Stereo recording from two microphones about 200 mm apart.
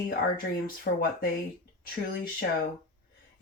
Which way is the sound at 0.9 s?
50° left (ahead or behind).